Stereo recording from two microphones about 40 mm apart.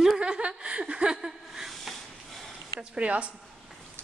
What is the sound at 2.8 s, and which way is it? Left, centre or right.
Speech, right.